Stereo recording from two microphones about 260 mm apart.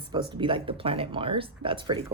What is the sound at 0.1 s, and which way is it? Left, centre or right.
Speech, centre.